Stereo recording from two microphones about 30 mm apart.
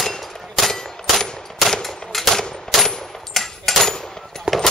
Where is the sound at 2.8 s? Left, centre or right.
Centre.